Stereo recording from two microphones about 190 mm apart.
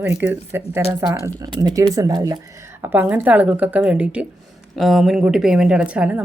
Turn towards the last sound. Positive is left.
turn(degrees=-5)  # may be behind; listen again after turning